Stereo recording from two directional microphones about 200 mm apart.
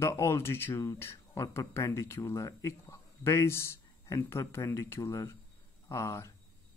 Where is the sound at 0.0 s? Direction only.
15° left (ahead or behind).